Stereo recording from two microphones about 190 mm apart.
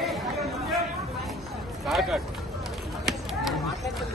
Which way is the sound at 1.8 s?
Centre (ahead or behind).